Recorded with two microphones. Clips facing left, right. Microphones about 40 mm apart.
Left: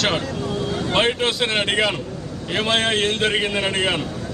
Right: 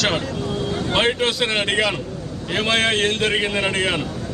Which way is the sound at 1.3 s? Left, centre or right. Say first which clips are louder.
Even; centre.